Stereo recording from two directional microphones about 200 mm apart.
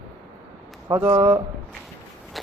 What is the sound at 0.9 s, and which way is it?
Speech, 25° right (ahead or behind).